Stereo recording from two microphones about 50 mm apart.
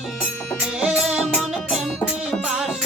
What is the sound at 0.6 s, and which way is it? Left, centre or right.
Music, centre.